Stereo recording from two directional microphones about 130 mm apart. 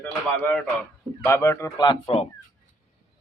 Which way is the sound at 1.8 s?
50° left (ahead or behind).